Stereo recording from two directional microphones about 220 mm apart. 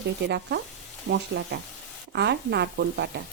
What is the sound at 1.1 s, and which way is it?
Speech, 50° right (ahead or behind).